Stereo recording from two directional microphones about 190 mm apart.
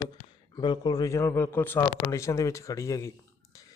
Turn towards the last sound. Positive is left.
turn(degrees=15)  # may be behind; listen again after turning